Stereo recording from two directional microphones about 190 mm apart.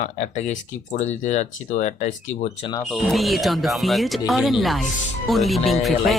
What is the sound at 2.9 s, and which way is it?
Speech, centre (ahead or behind).